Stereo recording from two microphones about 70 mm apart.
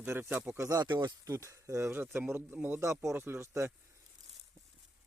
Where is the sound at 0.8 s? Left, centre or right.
Right.